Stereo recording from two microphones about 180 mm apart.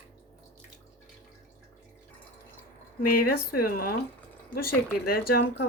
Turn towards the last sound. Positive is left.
turn(degrees=55)  # may be behind; listen again after turning